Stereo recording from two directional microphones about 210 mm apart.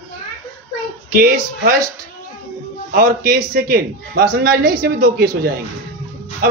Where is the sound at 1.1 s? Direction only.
45° right (ahead or behind).